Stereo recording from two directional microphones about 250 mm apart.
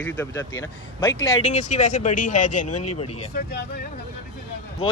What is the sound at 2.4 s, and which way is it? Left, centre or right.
Speech, left.